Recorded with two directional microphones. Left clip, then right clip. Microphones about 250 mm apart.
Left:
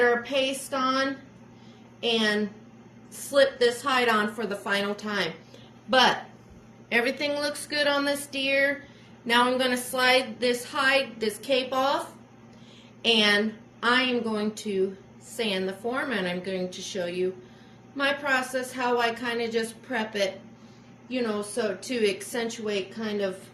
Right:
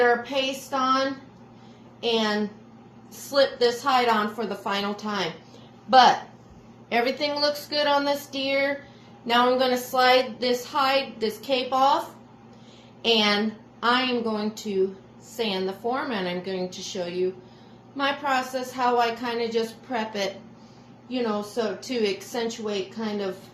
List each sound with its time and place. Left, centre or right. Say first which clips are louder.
0.0 s a woman's voice: right 1 dB; centre
6.9 s a sound: right 1 dB; centre
10.1 s a woman's voice: even; centre
13.0 s a woman's voice: even; centre